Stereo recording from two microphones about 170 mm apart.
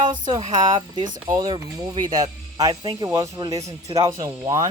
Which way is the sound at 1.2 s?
25° right (ahead or behind).